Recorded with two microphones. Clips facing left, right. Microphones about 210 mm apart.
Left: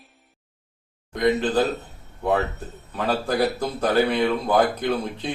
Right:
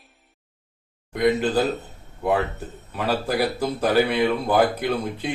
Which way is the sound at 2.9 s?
5° right (ahead or behind).